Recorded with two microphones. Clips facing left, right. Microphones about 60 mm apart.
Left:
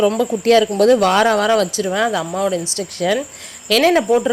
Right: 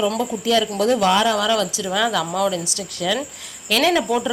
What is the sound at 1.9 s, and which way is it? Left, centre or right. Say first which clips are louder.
Speech: left 2 dB; left.